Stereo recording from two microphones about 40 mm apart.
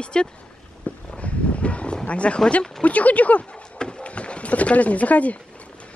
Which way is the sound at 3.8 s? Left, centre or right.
Left.